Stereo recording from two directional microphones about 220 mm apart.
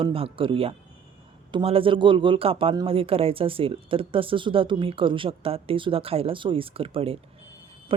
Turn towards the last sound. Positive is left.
turn(degrees=-25)  # may be behind; listen again after turning